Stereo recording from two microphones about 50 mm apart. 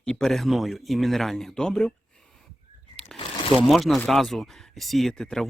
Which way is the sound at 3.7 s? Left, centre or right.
Centre.